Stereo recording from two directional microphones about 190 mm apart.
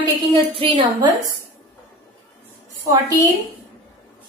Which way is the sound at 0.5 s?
25° right (ahead or behind).